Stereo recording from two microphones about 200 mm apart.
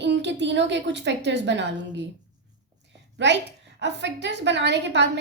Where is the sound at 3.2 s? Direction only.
60° right (ahead or behind).